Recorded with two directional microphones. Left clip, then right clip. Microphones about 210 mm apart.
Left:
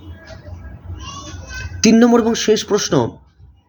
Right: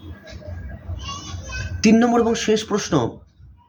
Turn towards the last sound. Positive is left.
turn(degrees=25)  # may be behind; listen again after turning